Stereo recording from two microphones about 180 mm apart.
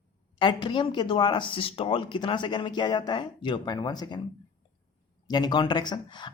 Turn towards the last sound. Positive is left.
turn(degrees=25)  # may be behind; listen again after turning